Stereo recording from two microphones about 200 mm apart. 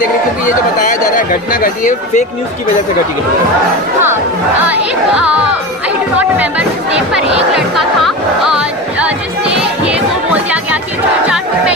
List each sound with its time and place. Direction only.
0.4 s speech: 40° left (ahead or behind)
4.6 s speech: 5° right (ahead or behind)